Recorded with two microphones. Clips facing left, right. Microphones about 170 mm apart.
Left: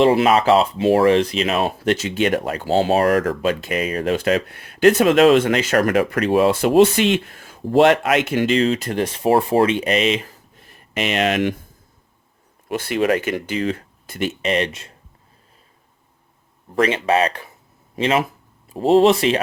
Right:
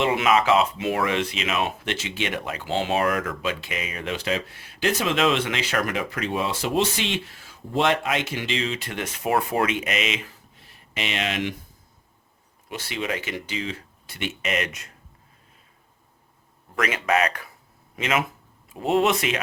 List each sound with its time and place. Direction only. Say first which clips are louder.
0.0 s speech: left 6 dB; 35° left (ahead or behind)
6.0 s speech: left 10 dB; 60° left (ahead or behind); by 10.3 s 35° left (ahead or behind)
10.6 s a sound: left 8 dB; 45° left (ahead or behind)
12.6 s speech: left 11 dB; 55° left (ahead or behind); by 14.9 s 30° left (ahead or behind)
16.7 s speech: left 6 dB; 30° left (ahead or behind)